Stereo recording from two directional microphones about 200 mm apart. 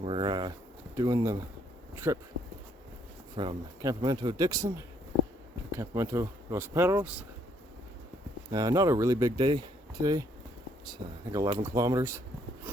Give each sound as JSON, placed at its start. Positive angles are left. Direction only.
{"t": 0.0, "sound": "speech", "side_deg": -25}
{"t": 3.3, "sound": "speech", "side_deg": -20}
{"t": 5.7, "sound": "speech", "side_deg": -15}
{"t": 8.5, "sound": "speech", "side_deg": -20}